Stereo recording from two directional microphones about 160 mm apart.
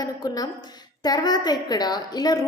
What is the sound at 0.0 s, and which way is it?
A woman's voice, 25° left (ahead or behind).